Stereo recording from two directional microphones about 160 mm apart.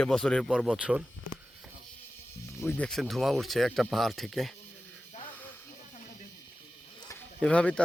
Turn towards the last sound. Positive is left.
turn(degrees=5)  # may be behind; listen again after turning